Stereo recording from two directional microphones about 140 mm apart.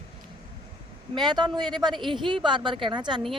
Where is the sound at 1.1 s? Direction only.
30° right (ahead or behind).